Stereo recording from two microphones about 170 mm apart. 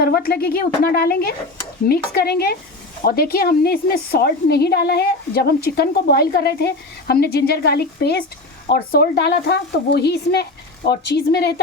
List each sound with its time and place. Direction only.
0.0 s a woman's voice: 60° left (ahead or behind)